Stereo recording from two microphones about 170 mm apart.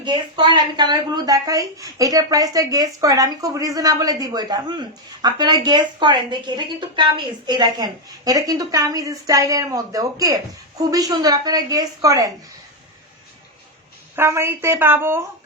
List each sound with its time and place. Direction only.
0.0 s speech: 25° right (ahead or behind)
14.2 s a woman's voice: 15° right (ahead or behind)